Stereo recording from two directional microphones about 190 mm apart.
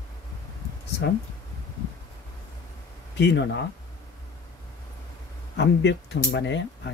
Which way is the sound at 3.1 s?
65° left (ahead or behind).